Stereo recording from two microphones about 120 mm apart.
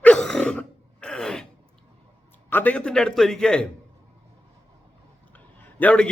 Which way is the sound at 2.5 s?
15° left (ahead or behind).